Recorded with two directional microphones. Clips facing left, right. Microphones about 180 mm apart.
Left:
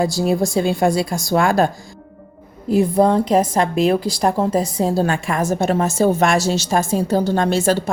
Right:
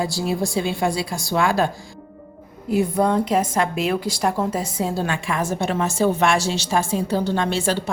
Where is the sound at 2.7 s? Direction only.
30° left (ahead or behind).